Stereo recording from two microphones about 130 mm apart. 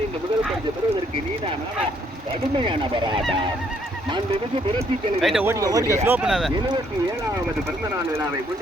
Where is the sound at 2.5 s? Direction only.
40° right (ahead or behind).